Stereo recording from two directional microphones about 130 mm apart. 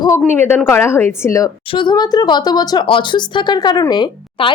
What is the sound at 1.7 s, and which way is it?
Speech, 35° left (ahead or behind).